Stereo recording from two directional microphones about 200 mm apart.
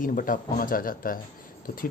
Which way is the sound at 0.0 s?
45° left (ahead or behind).